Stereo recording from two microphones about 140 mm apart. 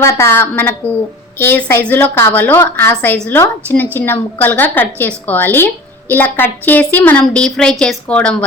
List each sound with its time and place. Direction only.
0.0 s a woman's voice: 20° left (ahead or behind)